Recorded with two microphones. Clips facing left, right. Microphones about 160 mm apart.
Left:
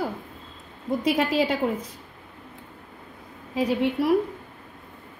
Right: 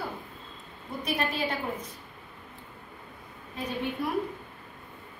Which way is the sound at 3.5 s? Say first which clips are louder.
Left 9 dB; 90° left.